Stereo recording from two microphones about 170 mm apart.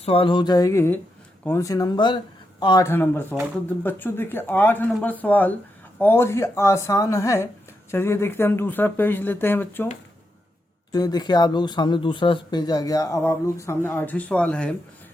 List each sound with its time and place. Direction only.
0.0 s speech: 35° left (ahead or behind)
2.8 s speech: 10° left (ahead or behind)
10.9 s speech: 25° left (ahead or behind); by 14.8 s 5° left (ahead or behind)